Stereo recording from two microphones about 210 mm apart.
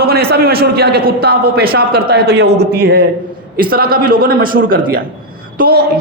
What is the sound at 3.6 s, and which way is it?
A man's voice, 45° right (ahead or behind).